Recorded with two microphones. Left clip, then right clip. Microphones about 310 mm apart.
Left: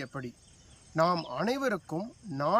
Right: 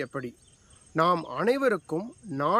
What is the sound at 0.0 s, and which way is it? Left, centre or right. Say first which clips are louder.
Speech: right 6 dB; centre.